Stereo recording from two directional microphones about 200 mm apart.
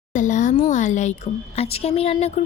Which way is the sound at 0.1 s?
40° left (ahead or behind).